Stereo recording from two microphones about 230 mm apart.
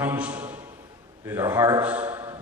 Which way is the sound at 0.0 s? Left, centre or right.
Centre.